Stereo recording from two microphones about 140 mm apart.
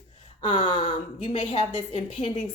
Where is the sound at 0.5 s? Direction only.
35° left (ahead or behind).